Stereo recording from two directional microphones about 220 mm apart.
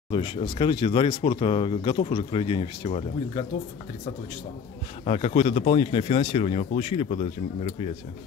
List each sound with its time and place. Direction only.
0.1 s speech: 20° left (ahead or behind)
5.0 s speech: 25° left (ahead or behind)